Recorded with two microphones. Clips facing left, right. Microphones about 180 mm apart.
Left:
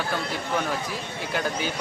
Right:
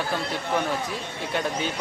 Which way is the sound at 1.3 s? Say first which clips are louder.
Right 1 dB; centre (ahead or behind).